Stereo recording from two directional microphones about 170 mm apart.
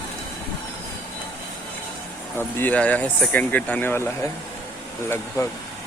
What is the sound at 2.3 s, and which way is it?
Speech, 10° left (ahead or behind).